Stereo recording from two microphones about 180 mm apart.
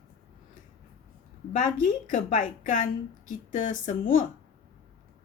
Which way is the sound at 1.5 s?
45° left (ahead or behind).